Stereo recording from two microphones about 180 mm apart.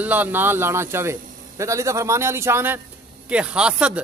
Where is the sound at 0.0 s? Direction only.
10° right (ahead or behind).